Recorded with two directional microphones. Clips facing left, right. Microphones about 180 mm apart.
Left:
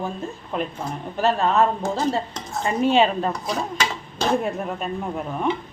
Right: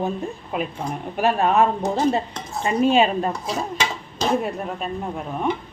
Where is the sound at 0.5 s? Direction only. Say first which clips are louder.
Even; 5° right (ahead or behind).